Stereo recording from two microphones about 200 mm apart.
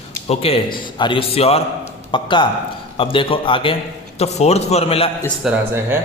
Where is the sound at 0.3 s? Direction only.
30° left (ahead or behind).